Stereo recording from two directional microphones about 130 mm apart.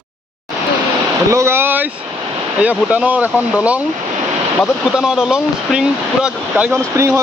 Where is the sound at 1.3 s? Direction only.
20° right (ahead or behind).